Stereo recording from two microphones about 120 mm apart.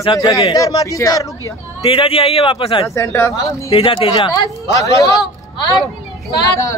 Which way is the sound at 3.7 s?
50° left (ahead or behind).